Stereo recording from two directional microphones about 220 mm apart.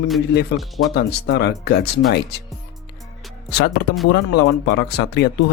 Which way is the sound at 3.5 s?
50° left (ahead or behind).